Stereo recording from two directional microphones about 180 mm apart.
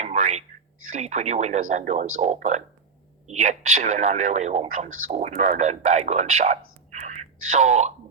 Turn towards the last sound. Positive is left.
turn(degrees=-40)  # may be behind; listen again after turning